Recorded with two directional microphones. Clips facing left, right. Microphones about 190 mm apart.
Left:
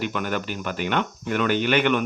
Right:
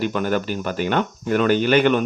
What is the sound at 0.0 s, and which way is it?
Speech, 35° right (ahead or behind).